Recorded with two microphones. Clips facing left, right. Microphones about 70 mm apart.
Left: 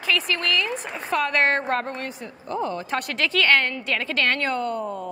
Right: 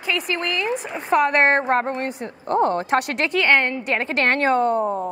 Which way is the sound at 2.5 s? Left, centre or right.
Right.